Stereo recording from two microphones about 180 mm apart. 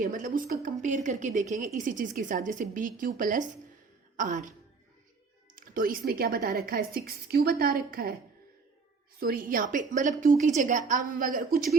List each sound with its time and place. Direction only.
0.0 s a woman's voice: 45° right (ahead or behind)
5.5 s a woman's voice: 50° right (ahead or behind)
9.2 s a woman's voice: 50° right (ahead or behind)